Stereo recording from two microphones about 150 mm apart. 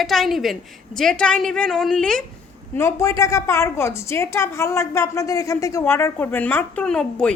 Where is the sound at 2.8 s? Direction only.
20° left (ahead or behind).